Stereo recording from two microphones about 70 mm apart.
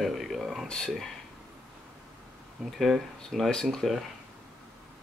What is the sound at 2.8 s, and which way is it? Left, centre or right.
Speech, centre.